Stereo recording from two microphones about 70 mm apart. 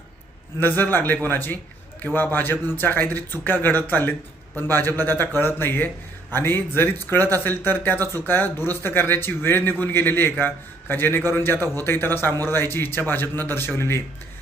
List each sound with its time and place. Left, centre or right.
0.6 s a man's voice: left